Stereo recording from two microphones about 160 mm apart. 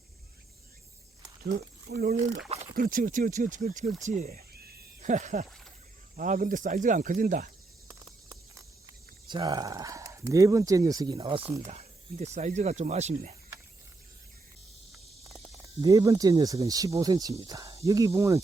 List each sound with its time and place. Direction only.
1.9 s speech: 90° right
2.7 s speech: 60° right (ahead or behind)
9.3 s speech: 25° right (ahead or behind)
11.6 s speech: 40° right (ahead or behind)
15.6 s speech: 20° right (ahead or behind)